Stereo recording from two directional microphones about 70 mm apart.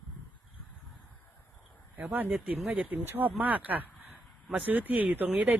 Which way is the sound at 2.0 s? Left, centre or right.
Right.